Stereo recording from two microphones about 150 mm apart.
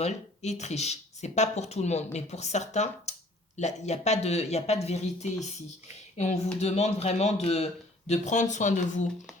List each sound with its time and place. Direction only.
0.0 s speech: 50° left (ahead or behind)